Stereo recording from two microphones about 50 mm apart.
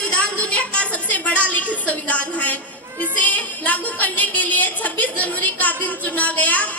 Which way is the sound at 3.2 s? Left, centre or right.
Left.